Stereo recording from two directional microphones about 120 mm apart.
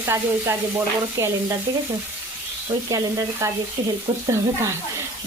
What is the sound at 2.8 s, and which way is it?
Frying, 30° right (ahead or behind).